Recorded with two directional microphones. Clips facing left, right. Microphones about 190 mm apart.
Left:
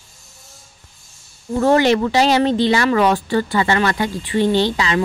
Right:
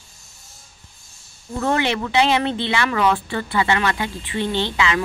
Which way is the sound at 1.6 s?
35° left (ahead or behind).